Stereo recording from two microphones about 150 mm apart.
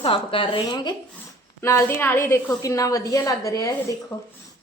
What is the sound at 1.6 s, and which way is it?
A woman's voice, 15° left (ahead or behind).